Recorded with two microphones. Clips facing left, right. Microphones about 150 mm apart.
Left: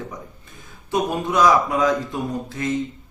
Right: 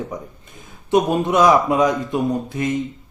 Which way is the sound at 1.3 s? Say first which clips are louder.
Right 1 dB; 20° right (ahead or behind).